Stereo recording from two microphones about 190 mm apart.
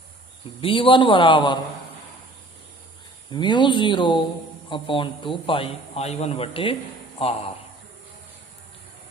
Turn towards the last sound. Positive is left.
turn(degrees=30)  # may be behind; listen again after turning